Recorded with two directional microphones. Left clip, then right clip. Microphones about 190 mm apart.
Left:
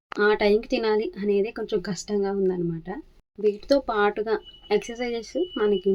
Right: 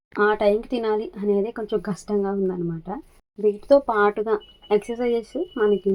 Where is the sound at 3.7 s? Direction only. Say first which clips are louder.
Right 6 dB; 5° left (ahead or behind).